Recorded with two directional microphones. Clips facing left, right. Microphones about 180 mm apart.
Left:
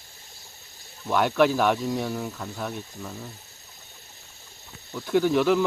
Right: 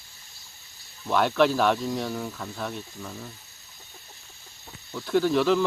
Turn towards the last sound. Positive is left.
turn(degrees=10)  # may be behind; listen again after turning